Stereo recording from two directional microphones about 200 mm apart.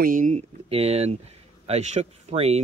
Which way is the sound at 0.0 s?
40° right (ahead or behind).